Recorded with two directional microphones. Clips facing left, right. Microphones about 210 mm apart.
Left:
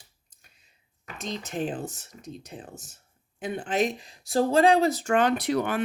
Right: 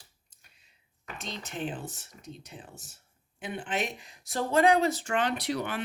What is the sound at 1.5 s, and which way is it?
Speech, 45° left (ahead or behind).